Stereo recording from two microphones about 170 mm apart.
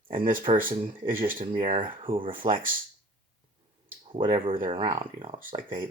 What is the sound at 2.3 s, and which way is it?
Speech, 55° right (ahead or behind).